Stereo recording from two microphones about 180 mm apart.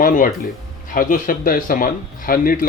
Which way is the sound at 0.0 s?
45° left (ahead or behind).